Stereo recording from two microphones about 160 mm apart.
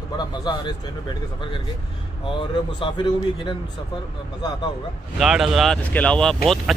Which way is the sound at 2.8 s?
30° left (ahead or behind).